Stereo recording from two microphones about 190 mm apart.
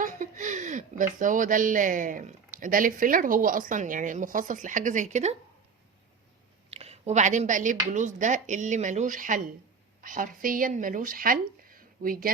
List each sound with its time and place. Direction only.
0.0 s speech: 45° right (ahead or behind)
6.7 s a woman's voice: 35° right (ahead or behind)